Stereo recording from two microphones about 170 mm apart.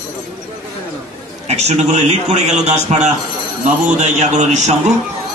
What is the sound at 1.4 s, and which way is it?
A man's voice, 40° right (ahead or behind).